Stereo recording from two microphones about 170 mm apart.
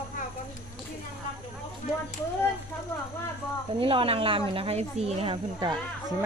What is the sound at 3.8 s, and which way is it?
Speech, 30° right (ahead or behind).